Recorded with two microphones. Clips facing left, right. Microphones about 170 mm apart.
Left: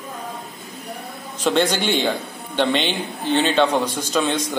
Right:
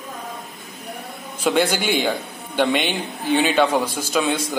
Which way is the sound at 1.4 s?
10° right (ahead or behind).